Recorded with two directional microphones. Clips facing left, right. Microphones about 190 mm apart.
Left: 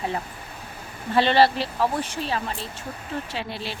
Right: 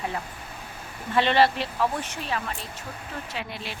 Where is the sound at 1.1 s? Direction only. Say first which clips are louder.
Left 2 dB; 35° left (ahead or behind).